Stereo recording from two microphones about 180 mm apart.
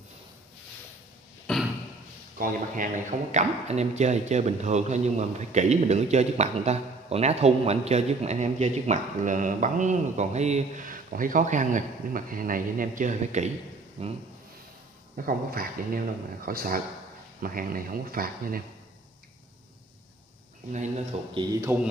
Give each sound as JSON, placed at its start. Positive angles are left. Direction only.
{"t": 1.5, "sound": "a sound", "side_deg": 5}
{"t": 2.3, "sound": "speech", "side_deg": -50}
{"t": 15.1, "sound": "speech", "side_deg": -55}
{"t": 20.7, "sound": "speech", "side_deg": -40}
{"t": 21.3, "sound": "a man's voice", "side_deg": -25}